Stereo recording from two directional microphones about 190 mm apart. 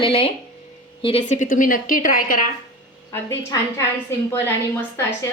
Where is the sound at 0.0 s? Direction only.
30° left (ahead or behind); by 2.5 s 45° left (ahead or behind).